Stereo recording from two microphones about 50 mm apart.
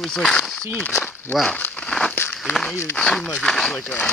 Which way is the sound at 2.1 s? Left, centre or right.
Left.